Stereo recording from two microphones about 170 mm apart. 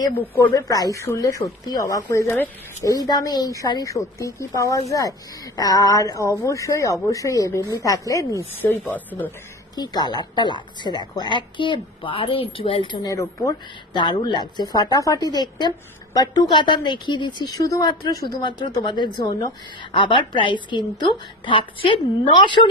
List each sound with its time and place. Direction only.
0.1 s speech: 10° left (ahead or behind)
0.6 s speech: 20° left (ahead or behind)
9.8 s speech: 25° left (ahead or behind)